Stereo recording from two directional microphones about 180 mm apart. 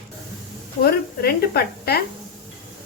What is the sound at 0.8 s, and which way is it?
Speech, 60° left (ahead or behind).